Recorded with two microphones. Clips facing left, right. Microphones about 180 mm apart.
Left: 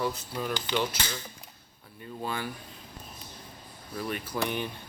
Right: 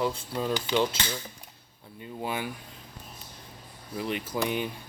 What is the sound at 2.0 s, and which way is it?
Speech, 15° right (ahead or behind).